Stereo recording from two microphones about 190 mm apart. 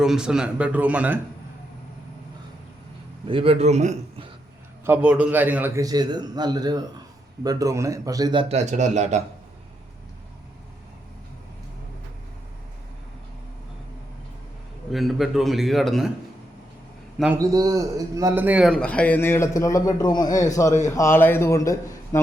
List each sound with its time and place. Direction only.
0.0 s speech: 5° right (ahead or behind)
3.2 s a man's voice: 30° right (ahead or behind)
4.9 s a man's voice: 5° right (ahead or behind); by 9.2 s 40° right (ahead or behind)
14.9 s a man's voice: centre (ahead or behind)
17.3 s a man's voice: 20° right (ahead or behind); by 22.2 s 15° left (ahead or behind)